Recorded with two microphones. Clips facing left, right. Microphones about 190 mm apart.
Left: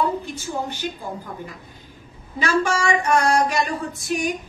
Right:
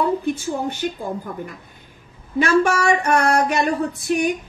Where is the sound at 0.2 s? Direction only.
55° right (ahead or behind).